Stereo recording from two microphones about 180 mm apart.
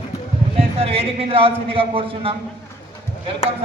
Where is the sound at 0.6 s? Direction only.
35° right (ahead or behind).